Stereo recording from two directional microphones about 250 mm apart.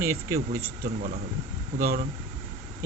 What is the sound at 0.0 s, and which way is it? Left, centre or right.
Speech, centre.